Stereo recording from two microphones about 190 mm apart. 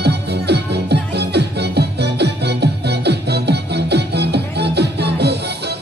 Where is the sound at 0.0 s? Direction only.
60° right (ahead or behind).